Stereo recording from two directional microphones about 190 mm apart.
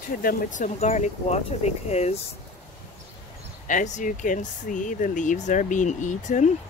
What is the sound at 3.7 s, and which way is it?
Speech, 45° left (ahead or behind).